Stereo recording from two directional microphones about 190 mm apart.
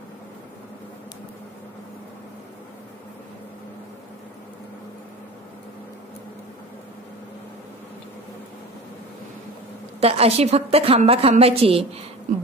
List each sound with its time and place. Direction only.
9.9 s a woman's voice: 30° right (ahead or behind)